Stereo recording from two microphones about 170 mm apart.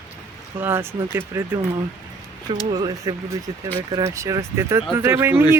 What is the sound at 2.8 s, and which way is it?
Speech, 25° right (ahead or behind).